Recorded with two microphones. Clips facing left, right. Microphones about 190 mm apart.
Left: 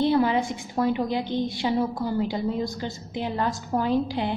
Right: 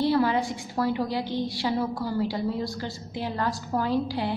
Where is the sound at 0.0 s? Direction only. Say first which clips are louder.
Left 2 dB; 20° left (ahead or behind).